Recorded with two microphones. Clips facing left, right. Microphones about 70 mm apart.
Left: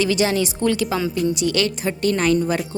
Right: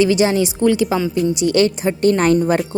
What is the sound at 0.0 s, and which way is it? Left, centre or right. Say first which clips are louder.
Speech: right 4 dB; centre.